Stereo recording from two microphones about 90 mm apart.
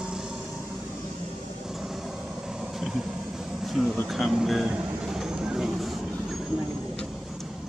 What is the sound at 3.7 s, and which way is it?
Speech, centre (ahead or behind).